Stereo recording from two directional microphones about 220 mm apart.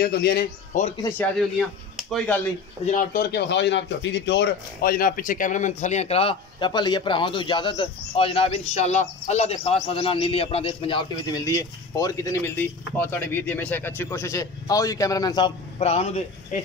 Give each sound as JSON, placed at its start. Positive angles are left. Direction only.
{"t": 0.0, "sound": "speech", "side_deg": 45}
{"t": 2.0, "sound": "a sound", "side_deg": 0}
{"t": 2.9, "sound": "a man's voice", "side_deg": 40}